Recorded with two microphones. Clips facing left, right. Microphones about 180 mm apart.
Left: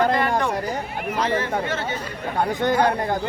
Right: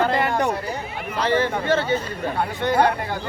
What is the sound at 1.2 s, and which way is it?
Speech, 30° right (ahead or behind).